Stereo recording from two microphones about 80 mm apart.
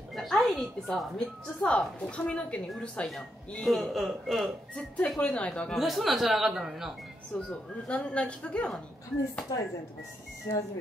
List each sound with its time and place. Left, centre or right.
0.1 s music: centre
1.6 s a woman's voice: centre
3.1 s a woman's voice: centre
5.8 s speech: centre
7.3 s a woman's voice: centre
10.5 s speech: left